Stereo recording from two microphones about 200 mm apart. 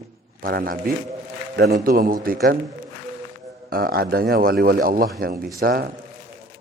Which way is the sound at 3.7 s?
50° right (ahead or behind).